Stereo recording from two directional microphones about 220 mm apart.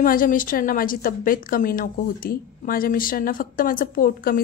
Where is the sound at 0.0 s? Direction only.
40° left (ahead or behind).